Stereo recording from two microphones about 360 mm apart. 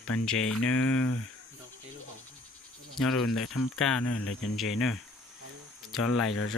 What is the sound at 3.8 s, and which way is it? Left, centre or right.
Speech, centre.